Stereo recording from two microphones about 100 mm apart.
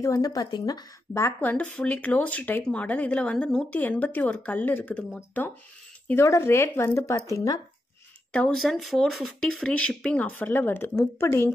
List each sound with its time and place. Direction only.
0.0 s speech: 35° left (ahead or behind)
1.1 s speech: 30° left (ahead or behind)
1.5 s speech: 15° left (ahead or behind)
6.0 s speech: 30° left (ahead or behind)
8.5 s speech: centre (ahead or behind); by 11.5 s 25° left (ahead or behind)